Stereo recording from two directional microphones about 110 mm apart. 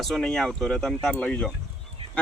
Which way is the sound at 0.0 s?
5° left (ahead or behind).